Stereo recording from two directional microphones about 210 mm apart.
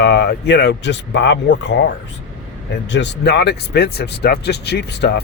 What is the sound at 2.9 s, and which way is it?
Speech, 55° left (ahead or behind).